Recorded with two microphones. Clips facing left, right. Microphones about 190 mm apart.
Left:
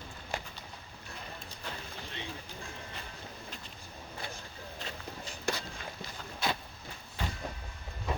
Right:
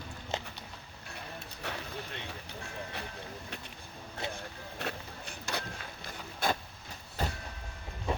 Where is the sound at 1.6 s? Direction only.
70° right (ahead or behind).